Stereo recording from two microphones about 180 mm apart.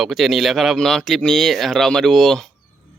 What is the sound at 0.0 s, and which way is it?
A man's voice, centre (ahead or behind).